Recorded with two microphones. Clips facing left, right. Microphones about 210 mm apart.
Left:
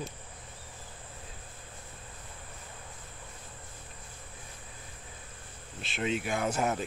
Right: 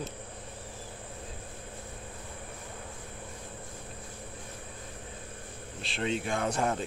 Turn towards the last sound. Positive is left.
turn(degrees=5)  # may be behind; listen again after turning